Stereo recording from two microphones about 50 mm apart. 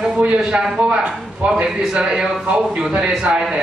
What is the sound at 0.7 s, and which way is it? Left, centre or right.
A man's voice, right.